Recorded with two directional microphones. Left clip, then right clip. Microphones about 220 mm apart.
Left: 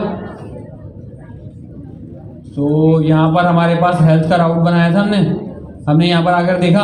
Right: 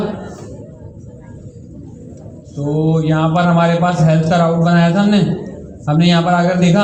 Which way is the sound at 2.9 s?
55° left (ahead or behind).